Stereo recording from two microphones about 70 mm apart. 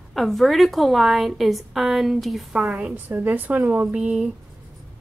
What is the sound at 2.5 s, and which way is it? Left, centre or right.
A woman's voice, centre.